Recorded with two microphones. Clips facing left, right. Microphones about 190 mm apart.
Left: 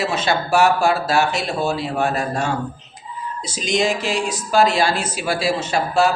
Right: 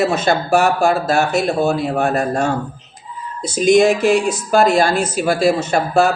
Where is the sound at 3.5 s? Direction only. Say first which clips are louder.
Right 9 dB; 55° right (ahead or behind).